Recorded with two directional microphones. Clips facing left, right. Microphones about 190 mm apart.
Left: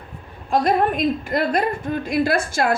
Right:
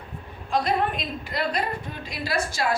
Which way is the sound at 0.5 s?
50° left (ahead or behind).